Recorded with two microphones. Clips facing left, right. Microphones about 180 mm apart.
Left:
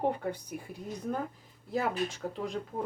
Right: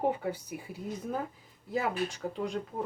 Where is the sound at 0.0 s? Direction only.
5° right (ahead or behind).